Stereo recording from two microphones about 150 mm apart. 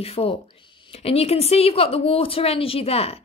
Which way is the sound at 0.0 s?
40° left (ahead or behind).